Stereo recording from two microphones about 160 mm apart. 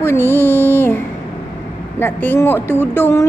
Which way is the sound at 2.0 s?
15° left (ahead or behind).